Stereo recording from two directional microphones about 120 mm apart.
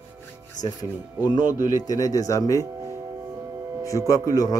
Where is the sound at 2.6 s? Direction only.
25° right (ahead or behind).